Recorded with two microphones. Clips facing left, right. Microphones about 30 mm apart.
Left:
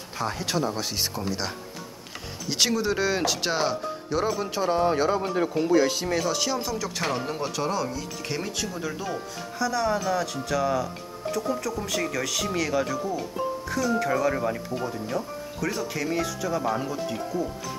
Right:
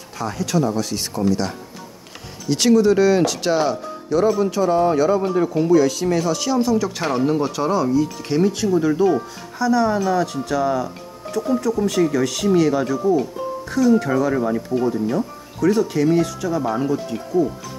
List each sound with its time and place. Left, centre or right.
0.2 s speech: left
4.5 s speech: left
6.0 s speech: centre
14.7 s speech: centre